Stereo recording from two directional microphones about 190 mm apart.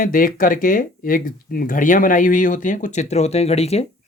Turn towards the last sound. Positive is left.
turn(degrees=35)  # may be behind; listen again after turning